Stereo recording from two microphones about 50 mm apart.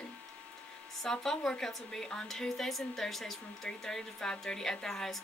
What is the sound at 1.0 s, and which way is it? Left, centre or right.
A woman's voice, centre.